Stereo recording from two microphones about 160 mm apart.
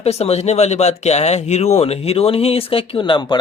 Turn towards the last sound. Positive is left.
turn(degrees=30)  # may be behind; listen again after turning